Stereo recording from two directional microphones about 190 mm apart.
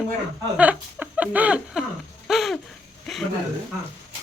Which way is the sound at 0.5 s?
5° right (ahead or behind).